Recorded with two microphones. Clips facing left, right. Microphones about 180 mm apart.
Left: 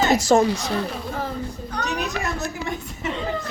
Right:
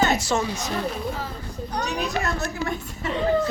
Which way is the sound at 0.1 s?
40° left (ahead or behind).